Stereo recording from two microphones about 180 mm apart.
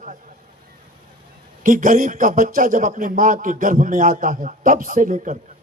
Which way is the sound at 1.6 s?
50° right (ahead or behind).